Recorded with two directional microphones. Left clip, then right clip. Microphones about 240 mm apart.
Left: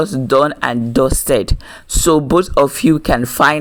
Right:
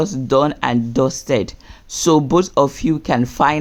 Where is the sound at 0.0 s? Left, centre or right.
Centre.